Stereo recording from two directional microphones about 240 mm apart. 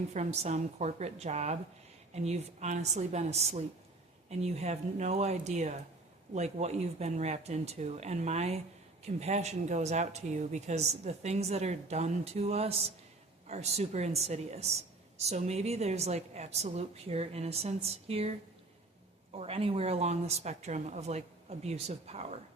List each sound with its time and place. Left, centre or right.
0.1 s speech: right